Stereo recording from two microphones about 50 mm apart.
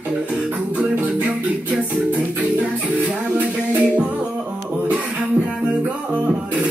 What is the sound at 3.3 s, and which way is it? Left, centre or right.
Music, right.